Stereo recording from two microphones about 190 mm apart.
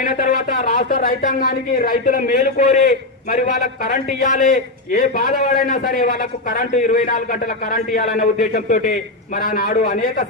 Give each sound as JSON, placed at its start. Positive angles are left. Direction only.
{"t": 0.0, "sound": "a man's voice", "side_deg": 45}